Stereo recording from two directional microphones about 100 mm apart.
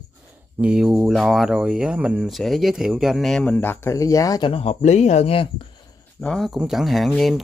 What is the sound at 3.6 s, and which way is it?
Speech, 20° left (ahead or behind).